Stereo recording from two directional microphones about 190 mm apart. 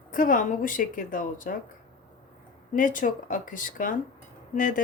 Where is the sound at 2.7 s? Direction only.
45° left (ahead or behind).